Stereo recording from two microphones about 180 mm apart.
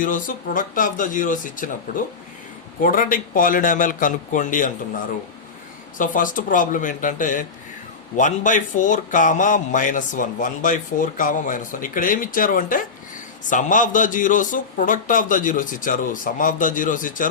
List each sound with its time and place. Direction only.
0.0 s a man's voice: 45° left (ahead or behind)
2.8 s a man's voice: 50° left (ahead or behind)
6.0 s a man's voice: 50° left (ahead or behind)